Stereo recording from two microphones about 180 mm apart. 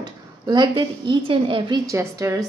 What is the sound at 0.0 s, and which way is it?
A woman's voice, 25° right (ahead or behind).